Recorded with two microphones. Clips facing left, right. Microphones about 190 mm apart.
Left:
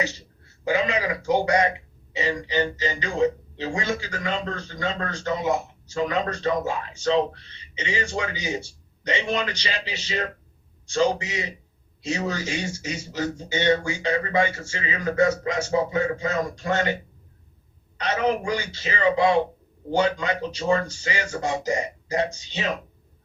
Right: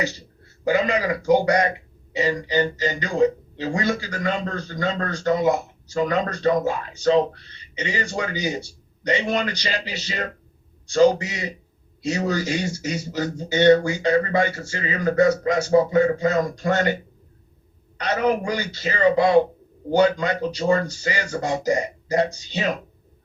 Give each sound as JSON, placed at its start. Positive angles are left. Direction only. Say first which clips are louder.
{"t": 0.6, "sound": "speech", "louder": "right 3 dB", "side_deg": -35}
{"t": 18.4, "sound": "speech", "louder": "right 2 dB", "side_deg": -40}